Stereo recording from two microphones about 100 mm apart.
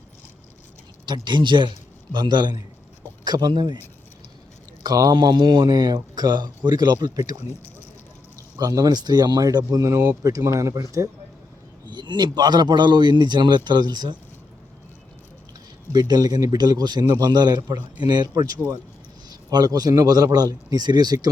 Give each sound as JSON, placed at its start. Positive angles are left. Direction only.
{"t": 1.0, "sound": "speech", "side_deg": -50}
{"t": 4.8, "sound": "speech", "side_deg": -40}
{"t": 8.5, "sound": "a man's voice", "side_deg": -35}
{"t": 11.9, "sound": "speech", "side_deg": -50}
{"t": 15.9, "sound": "a man's voice", "side_deg": -40}